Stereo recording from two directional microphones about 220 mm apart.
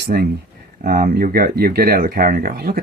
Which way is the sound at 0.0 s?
45° right (ahead or behind).